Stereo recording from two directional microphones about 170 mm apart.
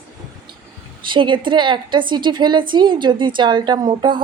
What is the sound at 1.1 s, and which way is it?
A woman's voice, 30° right (ahead or behind).